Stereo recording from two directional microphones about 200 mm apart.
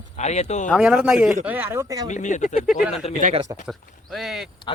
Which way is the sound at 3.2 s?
40° right (ahead or behind).